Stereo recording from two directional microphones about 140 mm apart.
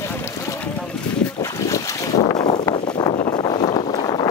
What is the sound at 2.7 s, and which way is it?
Wind noise, 40° left (ahead or behind).